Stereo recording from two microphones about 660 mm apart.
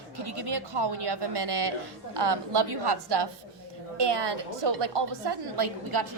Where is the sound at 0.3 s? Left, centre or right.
Right.